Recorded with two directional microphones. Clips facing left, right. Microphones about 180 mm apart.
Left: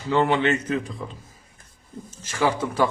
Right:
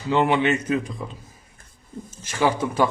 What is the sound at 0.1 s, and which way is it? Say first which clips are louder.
Speech: right 1 dB; 15° right (ahead or behind).